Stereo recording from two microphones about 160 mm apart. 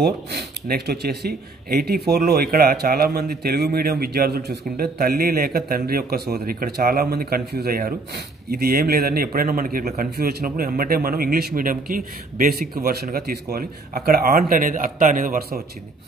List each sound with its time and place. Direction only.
0.3 s speech: 80° right; by 12.6 s 60° right (ahead or behind)
12.8 s a man's voice: 70° right (ahead or behind); by 15.6 s 55° right (ahead or behind)